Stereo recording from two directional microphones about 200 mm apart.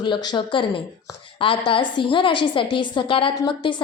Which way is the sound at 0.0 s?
20° left (ahead or behind).